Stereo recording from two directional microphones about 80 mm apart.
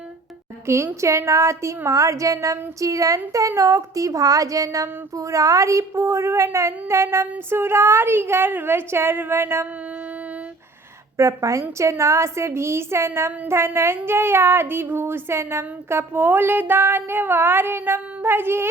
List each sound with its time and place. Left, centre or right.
0.7 s speech: right
11.2 s speech: right